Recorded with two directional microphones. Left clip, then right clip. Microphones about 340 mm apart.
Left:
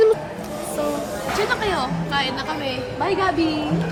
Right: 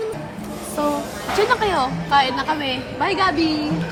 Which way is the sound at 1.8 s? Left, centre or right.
Centre.